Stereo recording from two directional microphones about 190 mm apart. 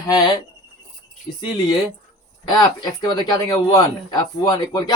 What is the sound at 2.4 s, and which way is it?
Speech, 20° left (ahead or behind).